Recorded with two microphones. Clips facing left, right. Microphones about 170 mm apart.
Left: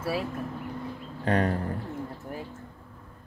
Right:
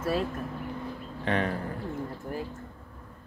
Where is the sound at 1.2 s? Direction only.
40° left (ahead or behind).